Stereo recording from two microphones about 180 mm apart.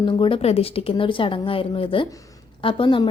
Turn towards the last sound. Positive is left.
turn(degrees=25)  # may be behind; listen again after turning